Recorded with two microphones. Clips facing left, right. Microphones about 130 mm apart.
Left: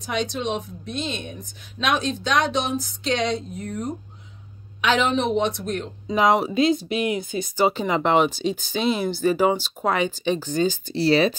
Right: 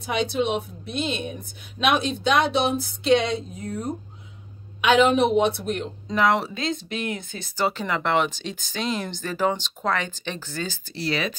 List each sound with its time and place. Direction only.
0.0 s speech: 10° right (ahead or behind)
4.8 s speech: 10° right (ahead or behind)
6.1 s speech: 15° left (ahead or behind)
11.0 s speech: 30° left (ahead or behind)